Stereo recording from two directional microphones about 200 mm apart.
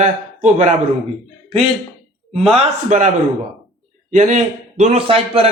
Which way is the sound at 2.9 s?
40° right (ahead or behind).